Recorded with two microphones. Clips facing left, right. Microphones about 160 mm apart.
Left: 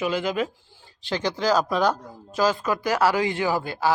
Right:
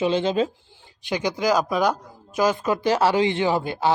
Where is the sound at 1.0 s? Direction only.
15° right (ahead or behind).